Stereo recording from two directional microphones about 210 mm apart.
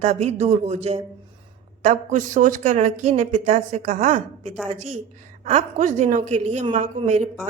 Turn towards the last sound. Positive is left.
turn(degrees=-35)  # may be behind; listen again after turning